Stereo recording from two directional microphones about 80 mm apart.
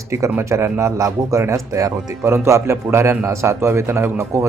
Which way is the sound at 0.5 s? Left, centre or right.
Right.